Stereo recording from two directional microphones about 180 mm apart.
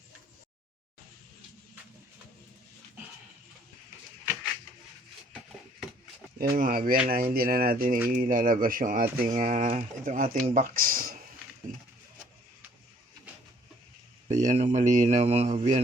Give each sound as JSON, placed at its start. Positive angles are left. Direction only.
{"t": 6.5, "sound": "speech", "side_deg": -50}
{"t": 14.4, "sound": "speech", "side_deg": -45}